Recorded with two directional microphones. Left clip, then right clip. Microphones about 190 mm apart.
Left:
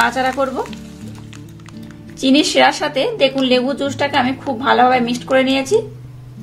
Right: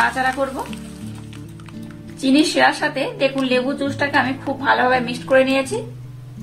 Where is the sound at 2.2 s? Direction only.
45° left (ahead or behind).